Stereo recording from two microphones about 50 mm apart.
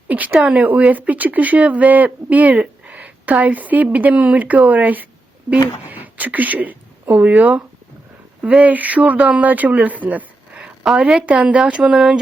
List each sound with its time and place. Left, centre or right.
0.1 s speech: right
10.8 s a woman's voice: centre
11.3 s speech: right